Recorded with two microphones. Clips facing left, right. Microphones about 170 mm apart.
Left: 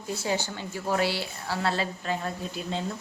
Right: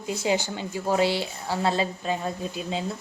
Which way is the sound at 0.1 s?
15° right (ahead or behind).